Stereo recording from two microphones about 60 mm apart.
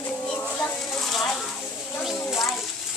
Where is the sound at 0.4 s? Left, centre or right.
Left.